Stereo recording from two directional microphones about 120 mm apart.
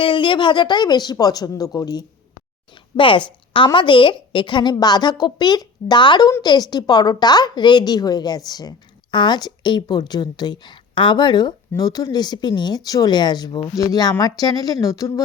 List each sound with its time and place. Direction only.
0.0 s a woman's voice: 45° left (ahead or behind)
2.9 s a woman's voice: 45° left (ahead or behind); by 15.2 s 30° left (ahead or behind)